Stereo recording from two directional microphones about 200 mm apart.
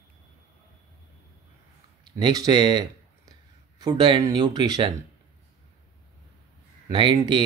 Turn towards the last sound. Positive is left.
turn(degrees=-20)  # may be behind; listen again after turning